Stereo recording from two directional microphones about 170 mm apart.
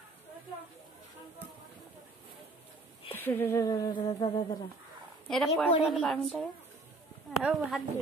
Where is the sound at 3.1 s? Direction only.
10° left (ahead or behind); by 4.6 s 25° left (ahead or behind).